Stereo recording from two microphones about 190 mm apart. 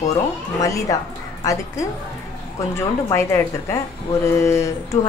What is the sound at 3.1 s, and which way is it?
A woman's voice, 15° left (ahead or behind).